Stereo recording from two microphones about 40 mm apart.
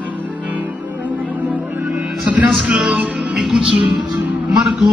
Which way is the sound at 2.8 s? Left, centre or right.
Centre.